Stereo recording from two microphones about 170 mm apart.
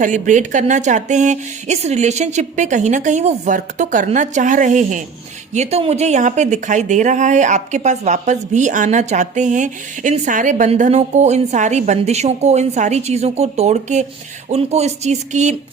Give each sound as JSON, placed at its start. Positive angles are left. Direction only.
{"t": 0.0, "sound": "speech", "side_deg": -50}